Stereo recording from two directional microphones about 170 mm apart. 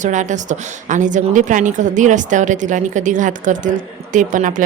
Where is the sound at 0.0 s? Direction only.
45° right (ahead or behind).